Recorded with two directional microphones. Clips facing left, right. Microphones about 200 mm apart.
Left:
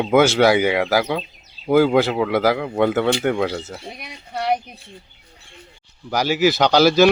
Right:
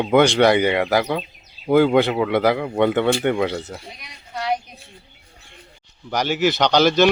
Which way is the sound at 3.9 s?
60° left (ahead or behind).